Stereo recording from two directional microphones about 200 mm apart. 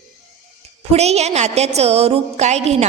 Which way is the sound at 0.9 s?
30° right (ahead or behind).